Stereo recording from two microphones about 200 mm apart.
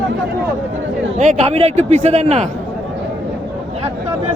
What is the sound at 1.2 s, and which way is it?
A man's voice, 35° right (ahead or behind).